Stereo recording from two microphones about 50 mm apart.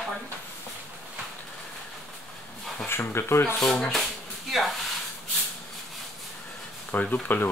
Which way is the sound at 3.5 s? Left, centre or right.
Centre.